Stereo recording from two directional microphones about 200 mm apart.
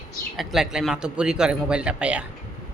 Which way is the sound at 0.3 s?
Centre (ahead or behind).